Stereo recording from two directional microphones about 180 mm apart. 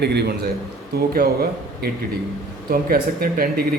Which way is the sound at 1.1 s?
55° right (ahead or behind).